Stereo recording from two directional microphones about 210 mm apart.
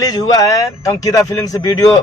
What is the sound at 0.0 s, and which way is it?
A man's voice, 15° left (ahead or behind).